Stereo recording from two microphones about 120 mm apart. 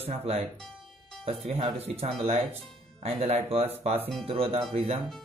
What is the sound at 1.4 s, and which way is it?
Speech, 55° right (ahead or behind).